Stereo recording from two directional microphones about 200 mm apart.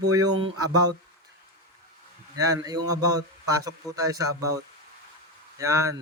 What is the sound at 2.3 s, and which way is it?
Speech, 15° right (ahead or behind).